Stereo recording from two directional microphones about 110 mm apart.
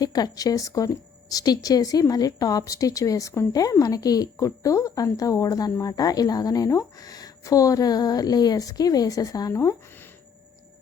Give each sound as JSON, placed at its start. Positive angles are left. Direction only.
{"t": 0.0, "sound": "a woman's voice", "side_deg": 35}